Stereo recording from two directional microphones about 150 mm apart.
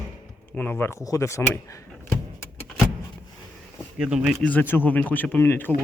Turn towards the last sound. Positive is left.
turn(degrees=15)  # may be behind; listen again after turning